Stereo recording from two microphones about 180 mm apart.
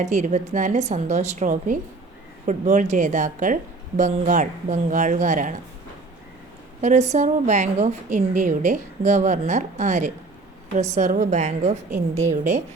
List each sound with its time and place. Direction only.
0.0 s a woman's voice: 40° right (ahead or behind)
6.8 s a woman's voice: 40° right (ahead or behind)